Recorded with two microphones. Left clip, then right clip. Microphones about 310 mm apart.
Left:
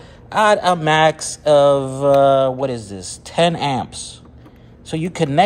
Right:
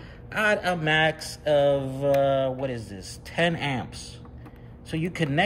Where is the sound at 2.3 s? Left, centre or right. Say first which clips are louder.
Left 9 dB; left.